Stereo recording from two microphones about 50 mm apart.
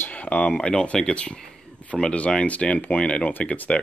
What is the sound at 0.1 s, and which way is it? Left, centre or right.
Speech, left.